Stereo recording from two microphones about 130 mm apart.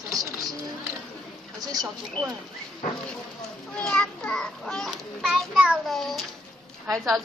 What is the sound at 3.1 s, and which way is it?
A child's voice, 5° left (ahead or behind).